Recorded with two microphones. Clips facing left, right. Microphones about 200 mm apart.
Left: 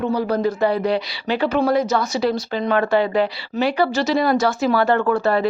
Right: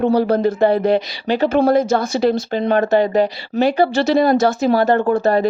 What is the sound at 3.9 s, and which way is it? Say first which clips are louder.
Speech: right 4 dB; 55° right (ahead or behind).